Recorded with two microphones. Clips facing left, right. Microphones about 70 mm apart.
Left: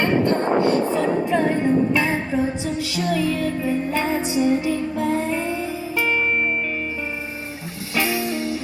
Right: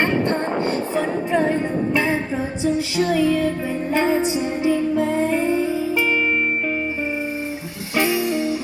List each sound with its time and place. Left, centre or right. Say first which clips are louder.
0.0 s music: left 1 dB; right
7.9 s music: right 3 dB; right